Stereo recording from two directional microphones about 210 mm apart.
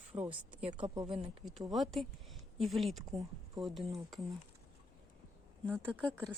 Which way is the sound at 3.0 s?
15° right (ahead or behind).